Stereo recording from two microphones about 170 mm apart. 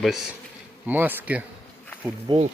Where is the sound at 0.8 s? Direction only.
10° right (ahead or behind).